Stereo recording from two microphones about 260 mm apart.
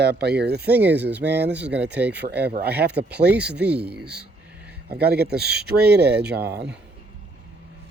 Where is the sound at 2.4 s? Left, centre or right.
Right.